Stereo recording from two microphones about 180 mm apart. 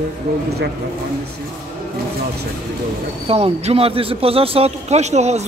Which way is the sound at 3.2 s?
35° right (ahead or behind).